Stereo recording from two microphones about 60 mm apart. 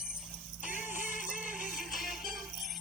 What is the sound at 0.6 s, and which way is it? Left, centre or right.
Music, right.